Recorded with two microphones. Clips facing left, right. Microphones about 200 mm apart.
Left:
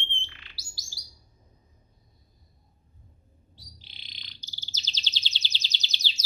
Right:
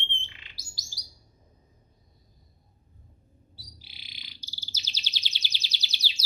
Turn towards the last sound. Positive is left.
turn(degrees=-10)  # may be behind; listen again after turning